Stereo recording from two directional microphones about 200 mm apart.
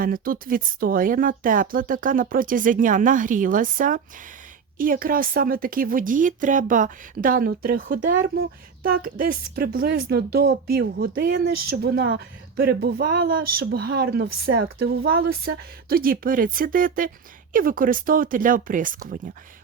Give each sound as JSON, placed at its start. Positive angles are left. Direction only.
{"t": 0.0, "sound": "speech", "side_deg": -45}